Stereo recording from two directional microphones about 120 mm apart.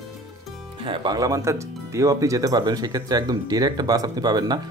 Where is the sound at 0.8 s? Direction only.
40° right (ahead or behind).